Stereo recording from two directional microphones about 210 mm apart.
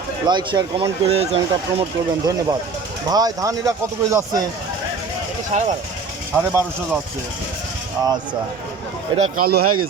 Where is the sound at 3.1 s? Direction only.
20° right (ahead or behind).